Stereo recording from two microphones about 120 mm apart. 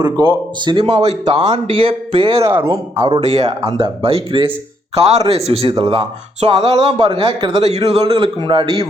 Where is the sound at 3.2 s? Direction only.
60° right (ahead or behind).